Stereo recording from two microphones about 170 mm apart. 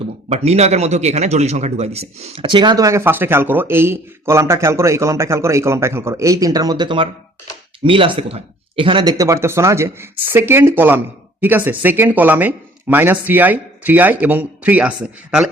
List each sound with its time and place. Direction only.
0.3 s a man's voice: 40° right (ahead or behind); by 15.4 s 5° right (ahead or behind)